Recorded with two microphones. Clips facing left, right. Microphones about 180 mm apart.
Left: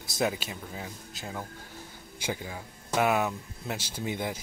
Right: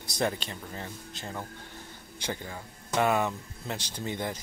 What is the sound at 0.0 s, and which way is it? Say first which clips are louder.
Speech: left 1 dB; 5° left (ahead or behind).